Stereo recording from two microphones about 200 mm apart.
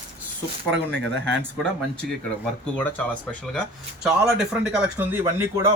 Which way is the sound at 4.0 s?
Centre (ahead or behind).